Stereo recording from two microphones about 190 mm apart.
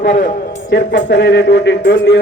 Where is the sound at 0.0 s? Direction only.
45° left (ahead or behind).